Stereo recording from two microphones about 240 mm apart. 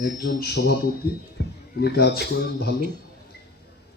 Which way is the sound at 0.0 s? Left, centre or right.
Left.